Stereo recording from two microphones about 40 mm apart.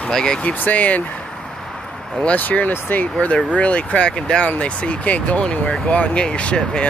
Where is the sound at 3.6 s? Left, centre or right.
Left.